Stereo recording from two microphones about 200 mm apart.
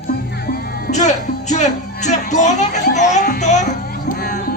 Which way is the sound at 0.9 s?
35° left (ahead or behind).